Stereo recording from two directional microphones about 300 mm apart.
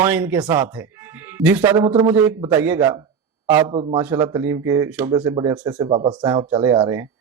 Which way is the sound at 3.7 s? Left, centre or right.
Centre.